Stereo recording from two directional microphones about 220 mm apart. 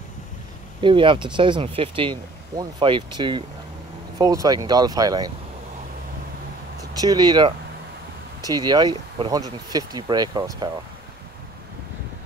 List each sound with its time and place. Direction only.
0.7 s speech: 20° right (ahead or behind)
6.8 s speech: 15° right (ahead or behind)